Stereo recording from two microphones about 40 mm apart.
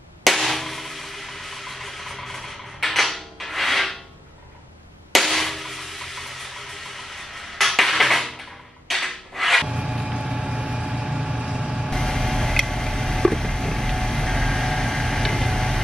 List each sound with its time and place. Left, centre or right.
0.2 s a sound: centre
5.1 s a sound: centre
7.5 s music: centre
8.8 s rub: centre
9.7 s vehicle: centre
11.9 s vehicle: centre